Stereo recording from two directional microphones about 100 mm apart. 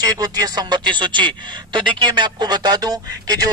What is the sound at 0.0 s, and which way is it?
Speech, 40° right (ahead or behind).